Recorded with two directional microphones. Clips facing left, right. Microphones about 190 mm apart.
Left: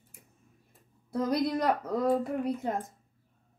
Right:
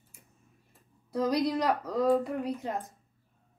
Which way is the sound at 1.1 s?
50° left (ahead or behind).